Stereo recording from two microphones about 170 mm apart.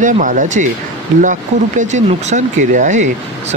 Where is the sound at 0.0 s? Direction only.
50° right (ahead or behind).